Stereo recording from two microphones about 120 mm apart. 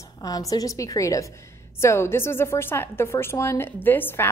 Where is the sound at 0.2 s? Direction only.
30° left (ahead or behind).